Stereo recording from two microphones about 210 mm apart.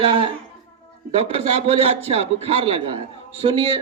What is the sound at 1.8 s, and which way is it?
A man's voice, 30° right (ahead or behind).